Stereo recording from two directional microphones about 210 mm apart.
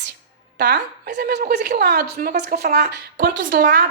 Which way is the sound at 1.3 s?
45° right (ahead or behind).